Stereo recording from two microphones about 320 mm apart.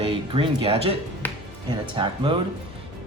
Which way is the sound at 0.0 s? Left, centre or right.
Centre.